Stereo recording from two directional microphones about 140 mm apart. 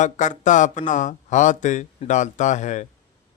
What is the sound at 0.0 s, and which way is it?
A man's voice, 60° left (ahead or behind).